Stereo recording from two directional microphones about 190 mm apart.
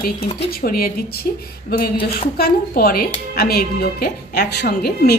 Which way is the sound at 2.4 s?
50° left (ahead or behind).